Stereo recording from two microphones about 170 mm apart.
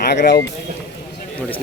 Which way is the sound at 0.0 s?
80° left.